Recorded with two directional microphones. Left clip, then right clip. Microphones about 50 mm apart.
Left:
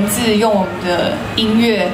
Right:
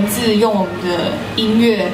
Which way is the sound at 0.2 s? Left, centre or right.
Left.